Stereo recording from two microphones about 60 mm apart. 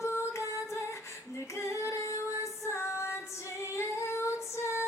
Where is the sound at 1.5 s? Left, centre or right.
Left.